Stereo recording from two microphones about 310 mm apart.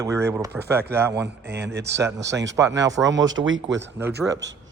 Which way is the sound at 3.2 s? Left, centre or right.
Right.